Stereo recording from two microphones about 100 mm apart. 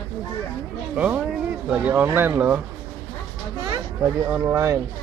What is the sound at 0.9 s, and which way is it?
Speech, 15° right (ahead or behind).